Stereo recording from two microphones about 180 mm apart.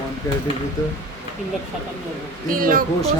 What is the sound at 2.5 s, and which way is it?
Speech, 50° right (ahead or behind).